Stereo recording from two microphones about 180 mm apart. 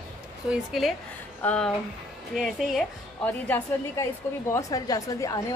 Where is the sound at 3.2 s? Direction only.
10° left (ahead or behind).